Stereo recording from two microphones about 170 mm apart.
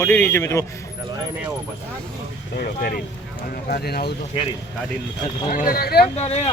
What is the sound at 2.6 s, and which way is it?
Speech, 60° left (ahead or behind).